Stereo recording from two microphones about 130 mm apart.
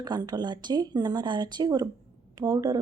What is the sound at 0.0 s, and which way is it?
A woman's voice, 30° right (ahead or behind).